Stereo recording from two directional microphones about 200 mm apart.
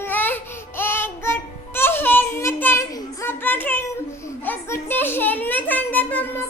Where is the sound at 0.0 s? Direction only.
10° left (ahead or behind).